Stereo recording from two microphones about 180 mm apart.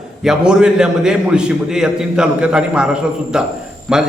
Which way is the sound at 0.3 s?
5° right (ahead or behind).